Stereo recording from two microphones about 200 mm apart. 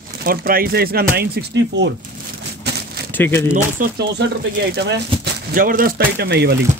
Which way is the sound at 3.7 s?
50° right (ahead or behind).